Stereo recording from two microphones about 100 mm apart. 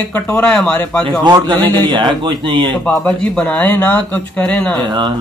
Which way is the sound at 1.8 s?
50° right (ahead or behind).